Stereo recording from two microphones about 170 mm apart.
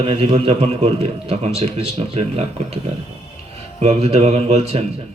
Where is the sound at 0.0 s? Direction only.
35° right (ahead or behind).